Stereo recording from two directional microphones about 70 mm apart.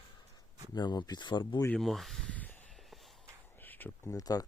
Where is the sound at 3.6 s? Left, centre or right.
Left.